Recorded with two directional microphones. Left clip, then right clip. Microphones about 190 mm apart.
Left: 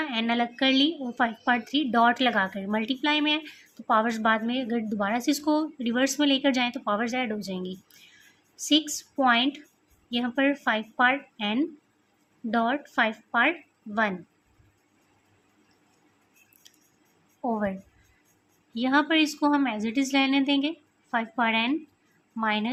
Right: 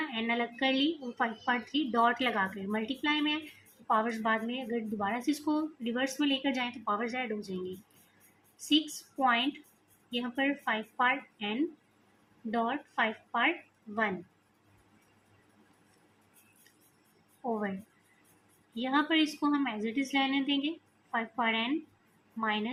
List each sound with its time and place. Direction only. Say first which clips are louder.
0.1 s a woman's voice: left 6 dB; 45° left (ahead or behind)
8.5 s a woman's voice: left 5 dB; 45° left (ahead or behind)
17.5 s a woman's voice: left 5 dB; 45° left (ahead or behind)